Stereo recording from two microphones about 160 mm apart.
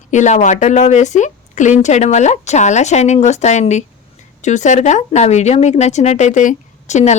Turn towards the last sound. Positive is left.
turn(degrees=45)  # may be behind; listen again after turning